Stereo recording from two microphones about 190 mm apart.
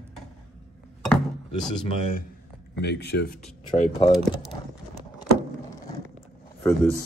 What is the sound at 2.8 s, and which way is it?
Speech, 60° left (ahead or behind).